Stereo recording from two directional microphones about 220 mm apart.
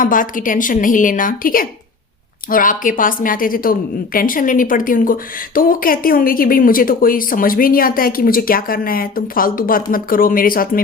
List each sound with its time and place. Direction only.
0.0 s a woman's voice: 40° left (ahead or behind)